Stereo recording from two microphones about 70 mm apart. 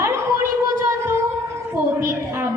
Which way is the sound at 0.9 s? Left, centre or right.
Right.